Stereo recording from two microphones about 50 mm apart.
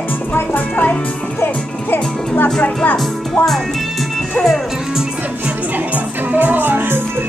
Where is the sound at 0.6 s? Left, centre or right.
Left.